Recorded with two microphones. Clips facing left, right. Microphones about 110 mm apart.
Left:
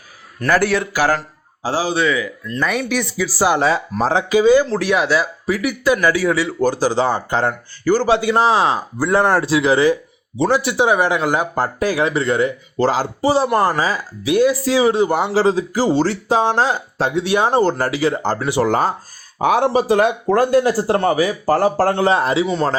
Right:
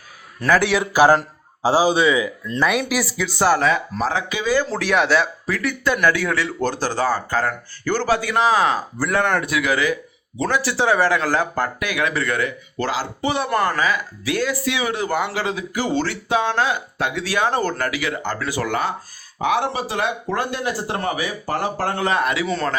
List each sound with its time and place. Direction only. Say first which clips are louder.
0.4 s speech: left 1 dB; centre (ahead or behind)
0.9 s a man's voice: right 4 dB; 20° right (ahead or behind)
2.6 s speech: even; 5° right (ahead or behind)
3.5 s speech: left 2 dB; 30° left (ahead or behind)
4.7 s speech: left 1 dB; centre (ahead or behind); by 11.7 s 20° left (ahead or behind)
11.8 s speech: left 5 dB; 35° left (ahead or behind)